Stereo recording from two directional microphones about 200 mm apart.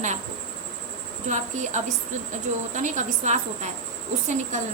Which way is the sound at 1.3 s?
35° right (ahead or behind).